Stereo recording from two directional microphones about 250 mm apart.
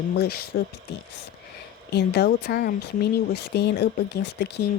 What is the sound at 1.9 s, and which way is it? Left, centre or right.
Speech, left.